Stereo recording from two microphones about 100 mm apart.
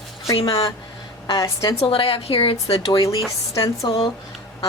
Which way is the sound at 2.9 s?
40° left (ahead or behind).